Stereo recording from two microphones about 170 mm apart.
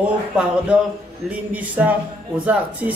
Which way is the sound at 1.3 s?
10° right (ahead or behind).